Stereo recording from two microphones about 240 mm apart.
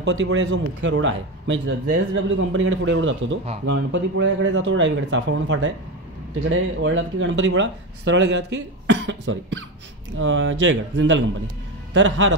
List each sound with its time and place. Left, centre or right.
0.0 s a man's voice: right